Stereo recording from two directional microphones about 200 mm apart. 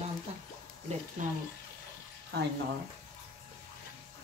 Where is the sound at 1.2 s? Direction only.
40° right (ahead or behind).